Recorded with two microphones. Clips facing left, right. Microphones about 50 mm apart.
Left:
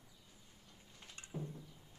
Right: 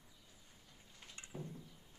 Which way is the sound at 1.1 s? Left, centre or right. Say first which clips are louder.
Left 2 dB; centre.